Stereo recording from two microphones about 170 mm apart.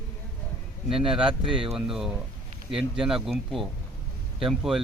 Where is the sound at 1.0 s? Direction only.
30° right (ahead or behind).